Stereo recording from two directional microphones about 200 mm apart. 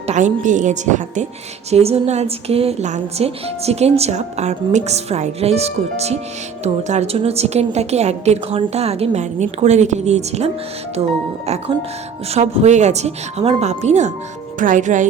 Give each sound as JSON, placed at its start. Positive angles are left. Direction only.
{"t": 0.1, "sound": "a woman's voice", "side_deg": -35}
{"t": 12.3, "sound": "a woman's voice", "side_deg": -35}